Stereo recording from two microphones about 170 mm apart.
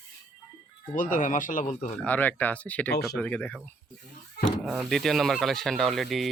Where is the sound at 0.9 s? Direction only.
50° left (ahead or behind).